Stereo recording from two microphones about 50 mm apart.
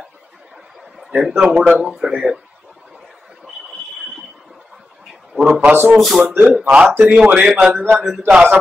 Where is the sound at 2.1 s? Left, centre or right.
Centre.